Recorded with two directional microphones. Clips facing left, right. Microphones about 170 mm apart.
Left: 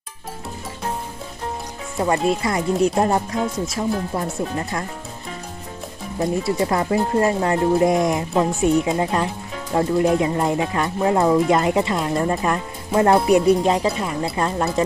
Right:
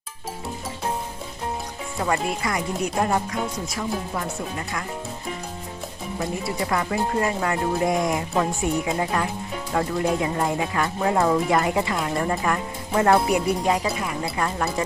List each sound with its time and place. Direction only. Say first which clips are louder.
2.0 s speech: left 5 dB; 25° left (ahead or behind)
6.1 s speech: left 7 dB; 30° left (ahead or behind)